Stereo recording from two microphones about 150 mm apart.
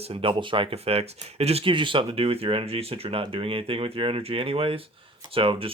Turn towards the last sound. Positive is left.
turn(degrees=-35)  # may be behind; listen again after turning